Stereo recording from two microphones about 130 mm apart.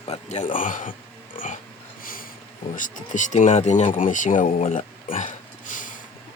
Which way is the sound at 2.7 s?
85° left.